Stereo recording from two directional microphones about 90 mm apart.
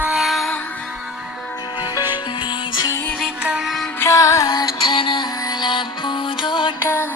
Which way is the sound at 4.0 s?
40° left (ahead or behind).